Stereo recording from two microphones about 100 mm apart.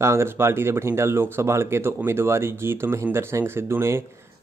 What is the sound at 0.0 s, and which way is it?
Speech, 25° right (ahead or behind).